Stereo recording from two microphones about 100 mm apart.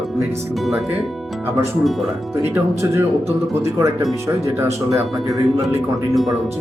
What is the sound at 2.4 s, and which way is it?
Speech, 20° right (ahead or behind).